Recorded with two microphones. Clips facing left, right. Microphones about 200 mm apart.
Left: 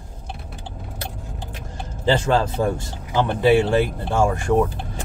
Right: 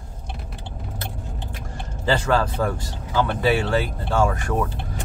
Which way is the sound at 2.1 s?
25° left (ahead or behind).